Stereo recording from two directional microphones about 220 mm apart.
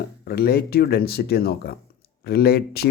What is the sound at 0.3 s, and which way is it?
Speech, 45° left (ahead or behind).